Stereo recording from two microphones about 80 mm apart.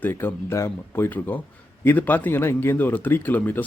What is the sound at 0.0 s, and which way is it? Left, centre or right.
A man's voice, left.